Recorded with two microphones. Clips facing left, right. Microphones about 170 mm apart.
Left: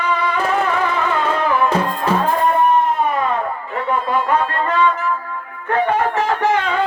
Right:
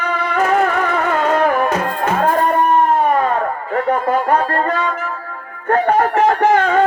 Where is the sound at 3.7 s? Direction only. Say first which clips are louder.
Right 3 dB; 45° right (ahead or behind).